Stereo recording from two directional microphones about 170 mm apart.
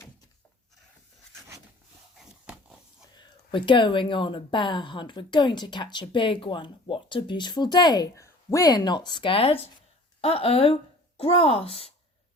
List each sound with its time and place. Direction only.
3.2 s a woman's voice: 30° left (ahead or behind)